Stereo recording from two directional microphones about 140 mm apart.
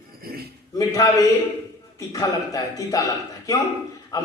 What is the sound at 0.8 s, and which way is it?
A man's voice, 25° left (ahead or behind).